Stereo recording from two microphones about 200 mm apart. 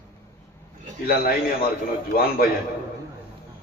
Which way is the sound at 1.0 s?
50° left (ahead or behind).